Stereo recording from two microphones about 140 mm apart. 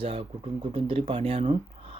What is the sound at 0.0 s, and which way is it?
Speech, 40° right (ahead or behind).